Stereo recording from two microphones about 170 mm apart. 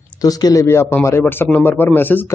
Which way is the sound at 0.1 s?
20° left (ahead or behind).